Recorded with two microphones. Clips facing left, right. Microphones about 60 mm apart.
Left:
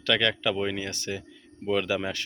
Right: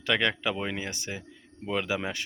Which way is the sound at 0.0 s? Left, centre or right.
Centre.